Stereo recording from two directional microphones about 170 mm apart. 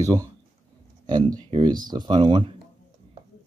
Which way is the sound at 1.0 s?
25° right (ahead or behind).